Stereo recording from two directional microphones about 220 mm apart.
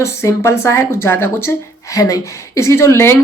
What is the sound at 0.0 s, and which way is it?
A woman's voice, 15° left (ahead or behind).